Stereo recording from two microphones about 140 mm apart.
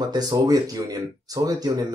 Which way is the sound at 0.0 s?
30° right (ahead or behind).